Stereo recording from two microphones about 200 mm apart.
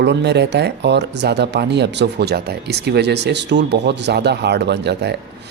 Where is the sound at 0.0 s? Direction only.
60° right (ahead or behind).